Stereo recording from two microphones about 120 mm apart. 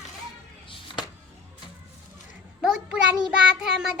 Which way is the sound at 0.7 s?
40° left (ahead or behind).